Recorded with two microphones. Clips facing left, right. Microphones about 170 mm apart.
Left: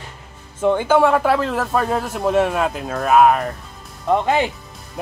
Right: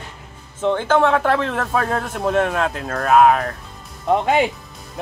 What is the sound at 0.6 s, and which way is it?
Speech, 10° left (ahead or behind).